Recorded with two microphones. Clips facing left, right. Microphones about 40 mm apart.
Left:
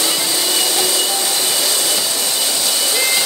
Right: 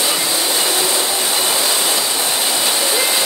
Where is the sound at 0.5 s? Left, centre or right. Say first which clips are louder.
Even; right.